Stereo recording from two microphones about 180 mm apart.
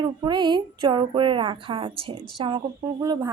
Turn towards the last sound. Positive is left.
turn(degrees=-20)  # may be behind; listen again after turning